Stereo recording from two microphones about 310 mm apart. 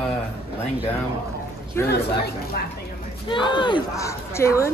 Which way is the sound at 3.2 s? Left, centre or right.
Centre.